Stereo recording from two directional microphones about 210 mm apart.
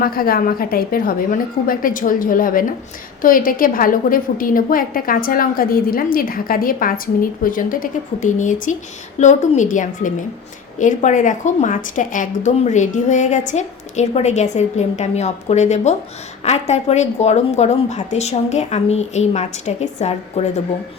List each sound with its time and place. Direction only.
0.0 s a woman's voice: 45° left (ahead or behind)